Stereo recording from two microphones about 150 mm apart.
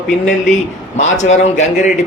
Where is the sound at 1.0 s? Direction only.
50° left (ahead or behind).